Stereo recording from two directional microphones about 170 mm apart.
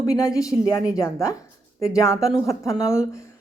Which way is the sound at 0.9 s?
20° left (ahead or behind).